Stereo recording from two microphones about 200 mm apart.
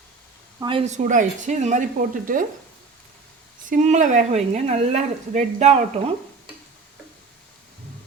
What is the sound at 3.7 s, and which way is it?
A woman's voice, 35° right (ahead or behind).